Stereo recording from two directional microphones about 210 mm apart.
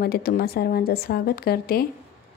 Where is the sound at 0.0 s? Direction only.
45° left (ahead or behind).